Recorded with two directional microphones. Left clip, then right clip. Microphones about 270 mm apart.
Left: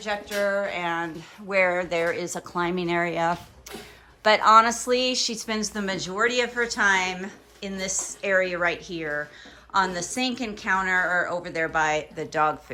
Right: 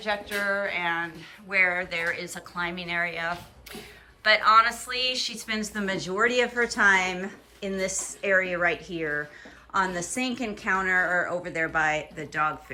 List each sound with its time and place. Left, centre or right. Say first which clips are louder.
0.0 s speech: left 2 dB; centre